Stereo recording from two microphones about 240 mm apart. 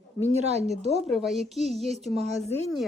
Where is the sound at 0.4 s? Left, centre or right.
Right.